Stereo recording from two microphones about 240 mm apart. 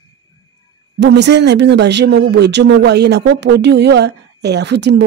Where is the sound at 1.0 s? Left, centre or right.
Right.